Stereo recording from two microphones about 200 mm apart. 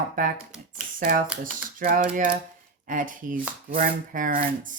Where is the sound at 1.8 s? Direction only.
45° right (ahead or behind).